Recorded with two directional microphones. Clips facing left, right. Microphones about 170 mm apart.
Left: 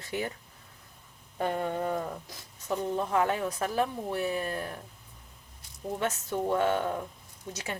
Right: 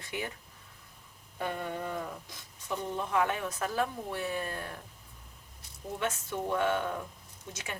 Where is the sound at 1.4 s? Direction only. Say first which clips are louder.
Left 5 dB; 40° left (ahead or behind).